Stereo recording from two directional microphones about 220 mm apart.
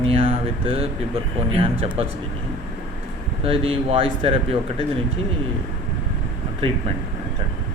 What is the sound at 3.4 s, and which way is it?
Speech, 25° right (ahead or behind).